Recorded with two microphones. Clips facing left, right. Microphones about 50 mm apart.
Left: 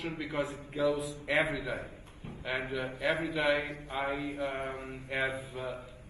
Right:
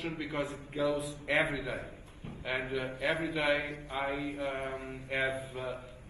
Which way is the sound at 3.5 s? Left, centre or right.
Left.